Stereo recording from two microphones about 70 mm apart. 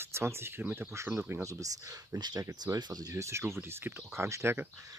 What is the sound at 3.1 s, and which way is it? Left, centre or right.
Speech, right.